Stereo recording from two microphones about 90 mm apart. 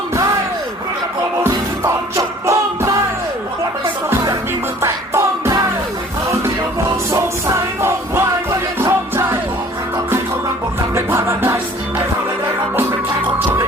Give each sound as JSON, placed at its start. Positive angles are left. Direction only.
{"t": 1.5, "sound": "music", "side_deg": -35}
{"t": 4.8, "sound": "music", "side_deg": -35}
{"t": 7.1, "sound": "music", "side_deg": -35}
{"t": 10.9, "sound": "music", "side_deg": -30}